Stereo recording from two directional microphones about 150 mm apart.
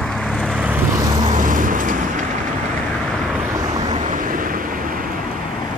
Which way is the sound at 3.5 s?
25° right (ahead or behind).